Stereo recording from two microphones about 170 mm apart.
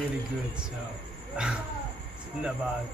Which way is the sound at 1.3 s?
5° right (ahead or behind).